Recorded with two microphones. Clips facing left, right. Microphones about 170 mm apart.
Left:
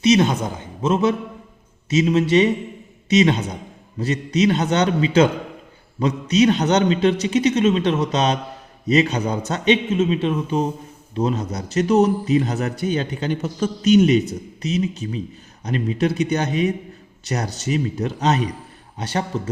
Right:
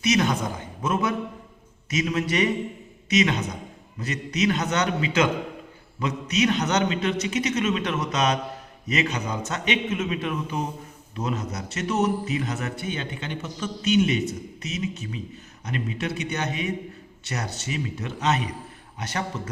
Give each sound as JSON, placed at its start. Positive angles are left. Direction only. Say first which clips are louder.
{"t": 0.0, "sound": "a man's voice", "louder": "left 6 dB", "side_deg": 25}